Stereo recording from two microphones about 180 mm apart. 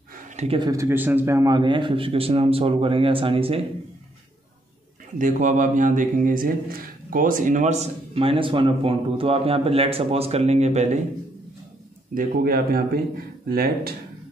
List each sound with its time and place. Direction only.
0.5 s a man's voice: 20° right (ahead or behind)
5.2 s a man's voice: 45° right (ahead or behind)
12.1 s speech: 55° right (ahead or behind)